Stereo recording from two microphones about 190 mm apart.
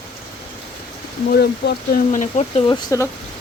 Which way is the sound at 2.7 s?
15° left (ahead or behind).